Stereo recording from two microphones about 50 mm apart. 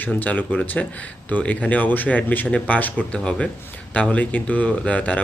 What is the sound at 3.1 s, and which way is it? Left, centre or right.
Speech, centre.